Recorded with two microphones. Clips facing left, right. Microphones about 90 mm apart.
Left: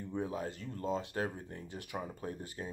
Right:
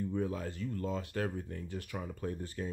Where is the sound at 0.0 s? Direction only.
20° left (ahead or behind).